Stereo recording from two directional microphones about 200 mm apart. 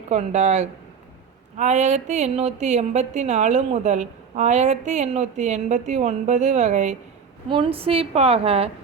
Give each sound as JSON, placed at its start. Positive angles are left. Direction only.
{"t": 0.1, "sound": "a woman's voice", "side_deg": -35}